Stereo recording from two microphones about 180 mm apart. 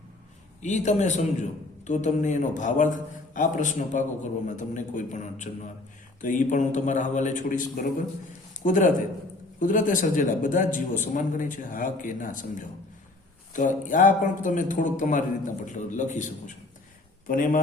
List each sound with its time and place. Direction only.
0.6 s a man's voice: 40° left (ahead or behind)
17.2 s a man's voice: 50° left (ahead or behind)